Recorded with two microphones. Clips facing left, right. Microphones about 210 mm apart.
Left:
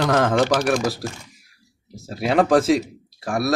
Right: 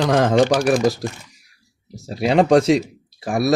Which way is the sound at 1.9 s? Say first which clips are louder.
Right 3 dB; centre (ahead or behind).